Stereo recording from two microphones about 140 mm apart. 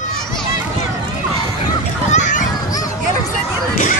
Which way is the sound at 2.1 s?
65° left (ahead or behind).